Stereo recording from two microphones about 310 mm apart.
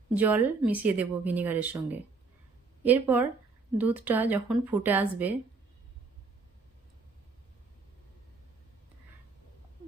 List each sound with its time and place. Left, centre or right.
0.1 s speech: centre